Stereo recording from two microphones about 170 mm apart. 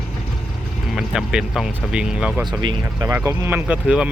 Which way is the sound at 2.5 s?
25° right (ahead or behind).